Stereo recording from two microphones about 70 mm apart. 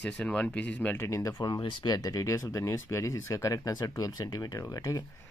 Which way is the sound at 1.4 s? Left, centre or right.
Left.